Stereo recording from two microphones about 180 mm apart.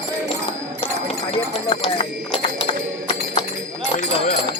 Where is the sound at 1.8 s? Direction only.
30° left (ahead or behind).